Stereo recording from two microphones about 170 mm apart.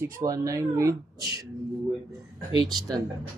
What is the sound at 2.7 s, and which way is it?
Speech, 25° right (ahead or behind).